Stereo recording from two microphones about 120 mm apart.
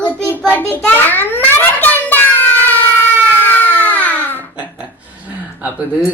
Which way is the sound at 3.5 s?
15° left (ahead or behind).